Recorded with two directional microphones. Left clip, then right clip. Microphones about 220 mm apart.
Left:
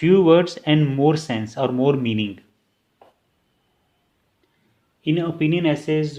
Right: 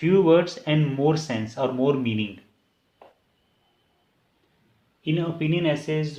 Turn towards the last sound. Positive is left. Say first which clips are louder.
# left 4 dB
turn(degrees=45)  # may be behind; listen again after turning